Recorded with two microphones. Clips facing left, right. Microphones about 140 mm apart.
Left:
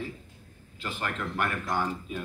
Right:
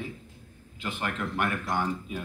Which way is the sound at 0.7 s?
15° right (ahead or behind).